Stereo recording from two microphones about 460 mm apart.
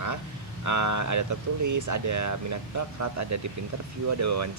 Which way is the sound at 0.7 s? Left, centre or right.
Right.